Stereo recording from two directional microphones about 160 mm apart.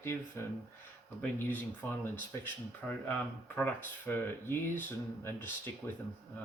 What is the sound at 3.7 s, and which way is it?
Speech, 15° left (ahead or behind).